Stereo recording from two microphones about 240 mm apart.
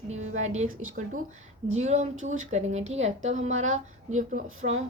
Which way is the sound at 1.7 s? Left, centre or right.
Right.